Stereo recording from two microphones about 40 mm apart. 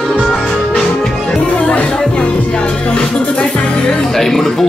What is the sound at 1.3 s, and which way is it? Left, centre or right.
Music, left.